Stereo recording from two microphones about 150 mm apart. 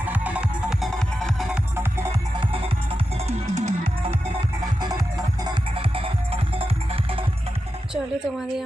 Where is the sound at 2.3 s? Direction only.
35° right (ahead or behind).